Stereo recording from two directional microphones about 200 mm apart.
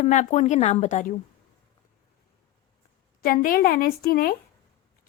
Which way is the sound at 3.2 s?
45° left (ahead or behind).